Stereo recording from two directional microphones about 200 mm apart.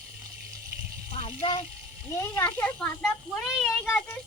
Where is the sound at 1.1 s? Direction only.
30° left (ahead or behind).